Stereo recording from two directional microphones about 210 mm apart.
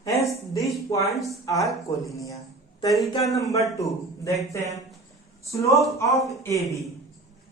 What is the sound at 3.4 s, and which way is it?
Speech, 15° left (ahead or behind).